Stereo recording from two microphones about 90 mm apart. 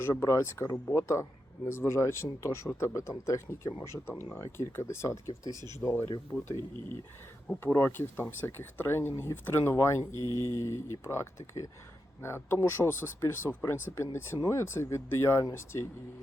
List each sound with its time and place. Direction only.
0.0 s speech: 30° left (ahead or behind)
5.8 s speech: centre (ahead or behind)
7.6 s speech: 25° left (ahead or behind)